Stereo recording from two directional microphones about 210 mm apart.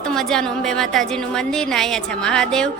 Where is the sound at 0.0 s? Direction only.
Centre (ahead or behind).